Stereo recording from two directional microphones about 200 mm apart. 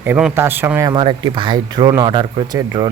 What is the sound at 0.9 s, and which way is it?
Speech, 25° right (ahead or behind).